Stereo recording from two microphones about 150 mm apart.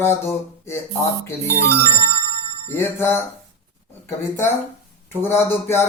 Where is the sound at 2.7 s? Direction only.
15° left (ahead or behind).